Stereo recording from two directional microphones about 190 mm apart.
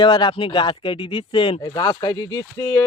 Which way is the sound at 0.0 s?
25° left (ahead or behind).